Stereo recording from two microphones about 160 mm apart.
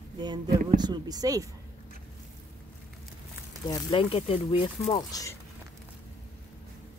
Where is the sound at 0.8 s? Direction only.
25° right (ahead or behind).